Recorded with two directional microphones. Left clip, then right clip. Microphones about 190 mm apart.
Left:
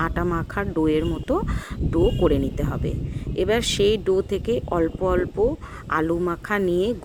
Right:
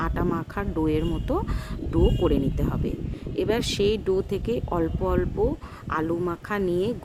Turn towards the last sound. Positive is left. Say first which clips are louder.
# left 4 dB
turn(degrees=20)  # may be behind; listen again after turning